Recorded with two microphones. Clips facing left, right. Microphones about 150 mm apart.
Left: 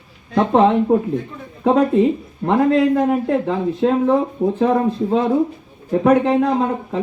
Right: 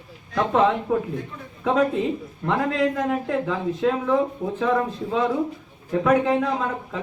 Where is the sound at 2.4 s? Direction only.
35° left (ahead or behind).